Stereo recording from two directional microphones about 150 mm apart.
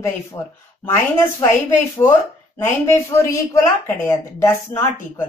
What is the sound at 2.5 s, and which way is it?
Speech, 15° left (ahead or behind).